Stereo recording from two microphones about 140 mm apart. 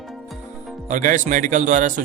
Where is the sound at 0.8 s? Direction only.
65° right (ahead or behind).